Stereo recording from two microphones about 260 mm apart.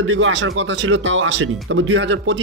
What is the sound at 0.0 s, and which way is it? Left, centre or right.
Speech, right.